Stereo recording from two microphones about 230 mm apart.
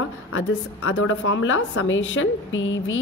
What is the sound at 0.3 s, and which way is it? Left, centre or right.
A woman's voice, left.